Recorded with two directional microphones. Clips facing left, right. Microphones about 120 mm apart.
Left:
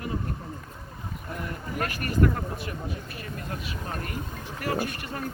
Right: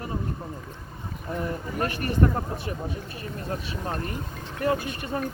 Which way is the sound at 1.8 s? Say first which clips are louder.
Right 1 dB; 30° right (ahead or behind).